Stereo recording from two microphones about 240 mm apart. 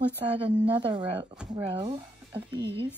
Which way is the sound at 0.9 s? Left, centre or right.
Centre.